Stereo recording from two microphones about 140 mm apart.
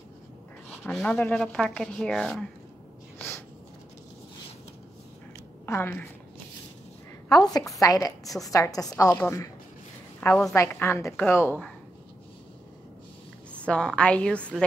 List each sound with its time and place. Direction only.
0.8 s speech: 10° left (ahead or behind)
3.2 s a sound: 15° left (ahead or behind)
5.7 s a woman's voice: 15° left (ahead or behind)
7.2 s a woman's voice: 25° left (ahead or behind)
10.5 s a woman's voice: 20° left (ahead or behind)
13.5 s a woman's voice: 10° left (ahead or behind)